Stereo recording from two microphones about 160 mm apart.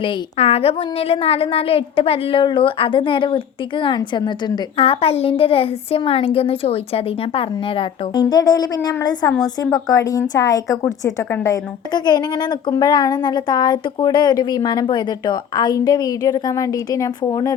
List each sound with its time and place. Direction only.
0.0 s a woman's voice: 35° left (ahead or behind); by 17.5 s 20° left (ahead or behind)